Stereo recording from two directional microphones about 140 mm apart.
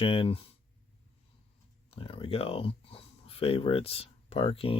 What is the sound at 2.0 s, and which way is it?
Speech, 40° left (ahead or behind).